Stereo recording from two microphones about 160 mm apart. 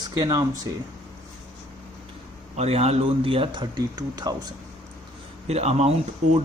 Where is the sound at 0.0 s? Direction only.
25° right (ahead or behind).